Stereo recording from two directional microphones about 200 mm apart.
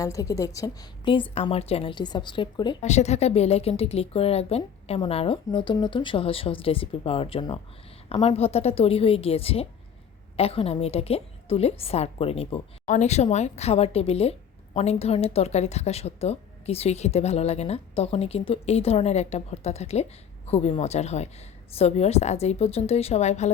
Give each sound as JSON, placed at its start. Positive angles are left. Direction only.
{"t": 0.0, "sound": "a woman's voice", "side_deg": 15}